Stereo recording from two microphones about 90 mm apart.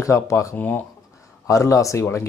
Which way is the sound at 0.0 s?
35° left (ahead or behind).